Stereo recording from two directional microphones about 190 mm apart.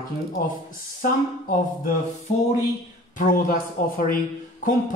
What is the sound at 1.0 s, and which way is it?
Speech, 45° left (ahead or behind).